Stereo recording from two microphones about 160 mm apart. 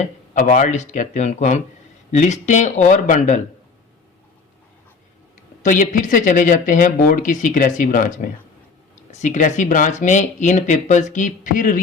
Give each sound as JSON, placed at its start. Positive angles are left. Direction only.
{"t": 0.3, "sound": "speech", "side_deg": 55}
{"t": 5.6, "sound": "speech", "side_deg": 55}